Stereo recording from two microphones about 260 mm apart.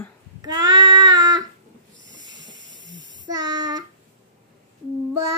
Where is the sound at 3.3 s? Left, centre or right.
Centre.